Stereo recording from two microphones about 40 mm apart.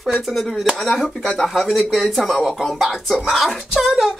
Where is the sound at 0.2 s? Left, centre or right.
Centre.